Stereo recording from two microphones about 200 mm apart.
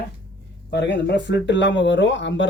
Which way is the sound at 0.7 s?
60° left (ahead or behind).